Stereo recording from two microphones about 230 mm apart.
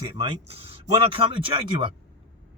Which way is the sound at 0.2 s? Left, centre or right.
Right.